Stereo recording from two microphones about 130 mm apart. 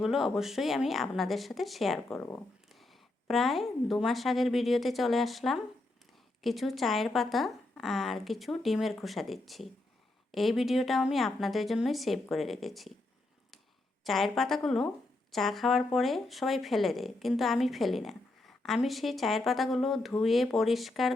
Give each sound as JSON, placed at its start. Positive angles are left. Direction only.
{"t": 0.0, "sound": "speech", "side_deg": -5}
{"t": 2.1, "sound": "speech", "side_deg": 20}
{"t": 2.7, "sound": "speech", "side_deg": 0}
{"t": 14.0, "sound": "speech", "side_deg": 0}